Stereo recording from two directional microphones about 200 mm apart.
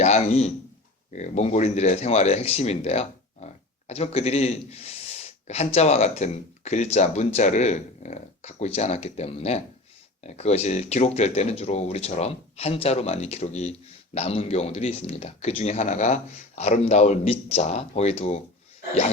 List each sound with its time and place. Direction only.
0.0 s a man's voice: 35° left (ahead or behind)